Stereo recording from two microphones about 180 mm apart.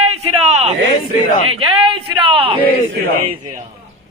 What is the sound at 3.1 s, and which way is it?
Speech, 50° right (ahead or behind).